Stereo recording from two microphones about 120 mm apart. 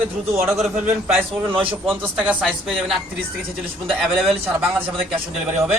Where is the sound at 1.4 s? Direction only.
45° right (ahead or behind).